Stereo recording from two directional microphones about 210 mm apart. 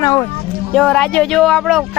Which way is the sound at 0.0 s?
20° left (ahead or behind).